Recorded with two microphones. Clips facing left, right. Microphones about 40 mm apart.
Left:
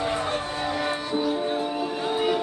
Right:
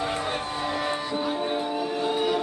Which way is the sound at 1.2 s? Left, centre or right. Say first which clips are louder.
Left 1 dB; centre.